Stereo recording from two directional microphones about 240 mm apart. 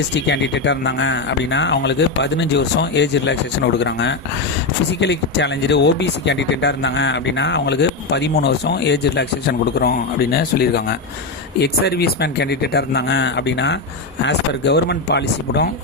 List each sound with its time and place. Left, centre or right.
0.1 s speech: left